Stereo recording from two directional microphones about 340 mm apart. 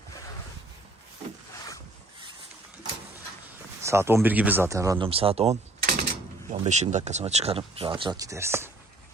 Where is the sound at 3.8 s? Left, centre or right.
Centre.